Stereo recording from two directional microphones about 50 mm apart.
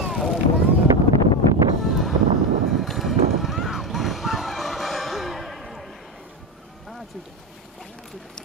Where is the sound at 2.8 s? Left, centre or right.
Centre.